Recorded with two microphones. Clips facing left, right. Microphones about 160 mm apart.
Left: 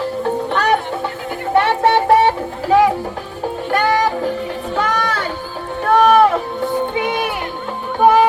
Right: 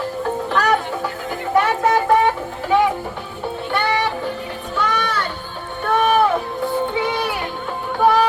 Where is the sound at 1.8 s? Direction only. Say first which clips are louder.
Left 4 dB; 30° left (ahead or behind).